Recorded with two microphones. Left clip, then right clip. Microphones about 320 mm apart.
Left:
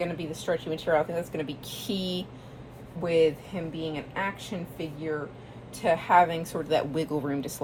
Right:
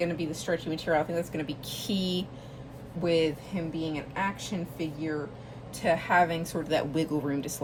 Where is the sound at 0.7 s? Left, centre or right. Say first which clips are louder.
Left 2 dB; centre.